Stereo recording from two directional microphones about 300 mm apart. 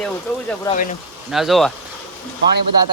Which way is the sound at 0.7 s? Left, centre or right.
Left.